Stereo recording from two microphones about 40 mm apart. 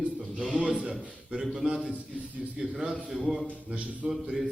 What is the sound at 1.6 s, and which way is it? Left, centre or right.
A man's voice, right.